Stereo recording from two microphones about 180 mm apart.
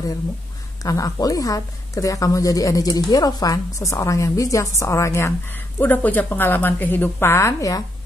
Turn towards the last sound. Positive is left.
turn(degrees=15)  # may be behind; listen again after turning